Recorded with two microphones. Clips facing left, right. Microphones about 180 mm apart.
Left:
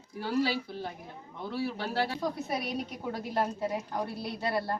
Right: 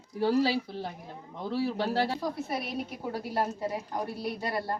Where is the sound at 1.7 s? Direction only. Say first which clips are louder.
Right 3 dB; 35° right (ahead or behind).